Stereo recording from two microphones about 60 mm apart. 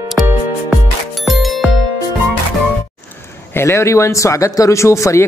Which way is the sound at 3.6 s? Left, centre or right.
Left.